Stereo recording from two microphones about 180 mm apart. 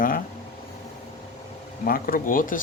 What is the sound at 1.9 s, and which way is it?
Speech, 50° left (ahead or behind).